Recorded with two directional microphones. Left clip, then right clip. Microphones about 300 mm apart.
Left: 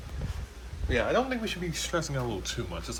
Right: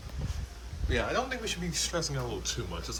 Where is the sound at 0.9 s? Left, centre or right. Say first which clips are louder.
Left 4 dB; centre.